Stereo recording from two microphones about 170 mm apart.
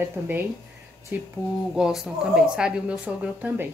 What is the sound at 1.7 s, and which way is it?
A woman's voice, centre (ahead or behind).